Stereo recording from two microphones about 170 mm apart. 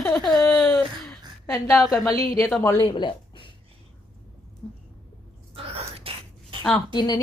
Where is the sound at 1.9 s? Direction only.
20° left (ahead or behind).